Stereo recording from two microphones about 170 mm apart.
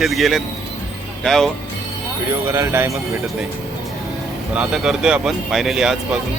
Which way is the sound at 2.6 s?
15° right (ahead or behind).